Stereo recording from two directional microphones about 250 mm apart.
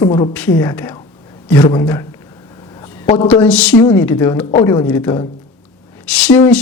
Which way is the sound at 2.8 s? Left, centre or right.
Centre.